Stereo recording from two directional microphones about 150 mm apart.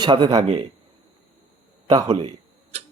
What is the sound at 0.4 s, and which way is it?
Speech, 40° right (ahead or behind).